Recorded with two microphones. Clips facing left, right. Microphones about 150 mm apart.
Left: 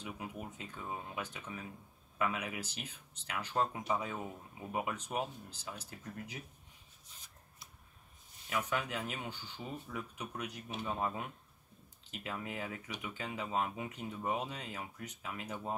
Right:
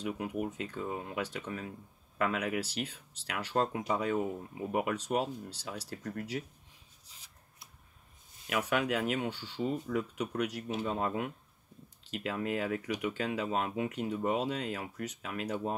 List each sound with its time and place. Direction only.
0.0 s speech: 70° right (ahead or behind)
8.5 s speech: 75° right (ahead or behind)